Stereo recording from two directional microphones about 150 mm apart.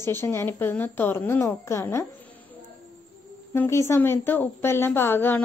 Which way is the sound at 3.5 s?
15° left (ahead or behind).